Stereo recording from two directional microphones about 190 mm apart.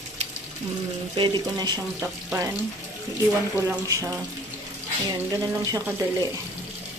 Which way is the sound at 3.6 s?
15° right (ahead or behind).